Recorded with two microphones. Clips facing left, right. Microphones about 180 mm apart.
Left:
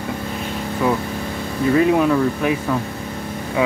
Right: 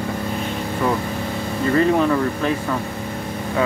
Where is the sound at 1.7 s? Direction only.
5° left (ahead or behind).